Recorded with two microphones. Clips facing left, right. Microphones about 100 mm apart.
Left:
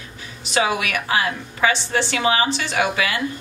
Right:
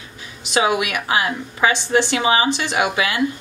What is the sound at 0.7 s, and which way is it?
A woman's voice, 15° right (ahead or behind).